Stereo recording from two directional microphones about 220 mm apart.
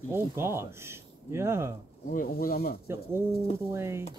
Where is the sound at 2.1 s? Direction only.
40° left (ahead or behind).